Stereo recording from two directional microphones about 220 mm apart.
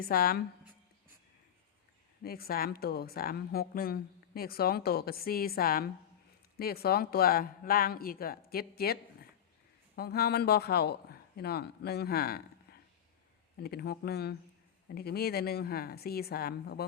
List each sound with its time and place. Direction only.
0.0 s a woman's voice: 45° left (ahead or behind)
2.2 s a woman's voice: 45° left (ahead or behind)
13.6 s a woman's voice: 45° left (ahead or behind)